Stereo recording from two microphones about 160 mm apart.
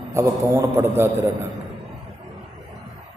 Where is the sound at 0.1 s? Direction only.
15° right (ahead or behind).